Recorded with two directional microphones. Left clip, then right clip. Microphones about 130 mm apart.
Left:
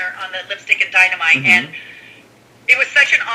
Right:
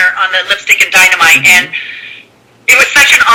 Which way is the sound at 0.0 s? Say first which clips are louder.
Right 15 dB; 35° right (ahead or behind).